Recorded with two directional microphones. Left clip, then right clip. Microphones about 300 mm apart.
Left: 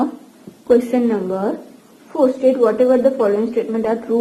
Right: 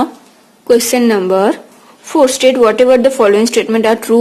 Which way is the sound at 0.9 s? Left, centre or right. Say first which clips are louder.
Right 8 dB; right.